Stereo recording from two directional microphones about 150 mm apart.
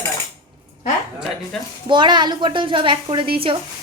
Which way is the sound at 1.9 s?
30° right (ahead or behind).